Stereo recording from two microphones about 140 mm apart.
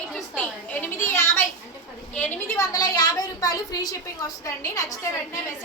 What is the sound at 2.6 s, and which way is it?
A woman's voice, 25° left (ahead or behind).